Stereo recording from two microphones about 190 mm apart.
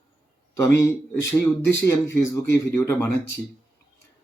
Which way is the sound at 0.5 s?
15° left (ahead or behind).